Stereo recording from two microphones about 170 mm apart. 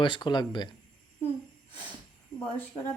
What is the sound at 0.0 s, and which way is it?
Speech, 25° left (ahead or behind).